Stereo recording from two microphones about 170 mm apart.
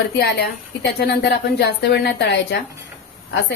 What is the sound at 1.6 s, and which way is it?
Speech, 75° left (ahead or behind).